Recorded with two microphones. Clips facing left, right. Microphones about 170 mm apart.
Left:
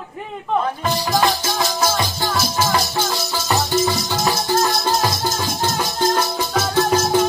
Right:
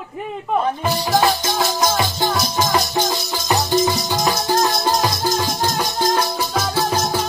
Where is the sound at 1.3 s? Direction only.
15° right (ahead or behind).